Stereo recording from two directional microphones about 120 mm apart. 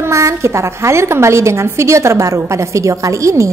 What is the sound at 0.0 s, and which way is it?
A woman's voice, 25° right (ahead or behind).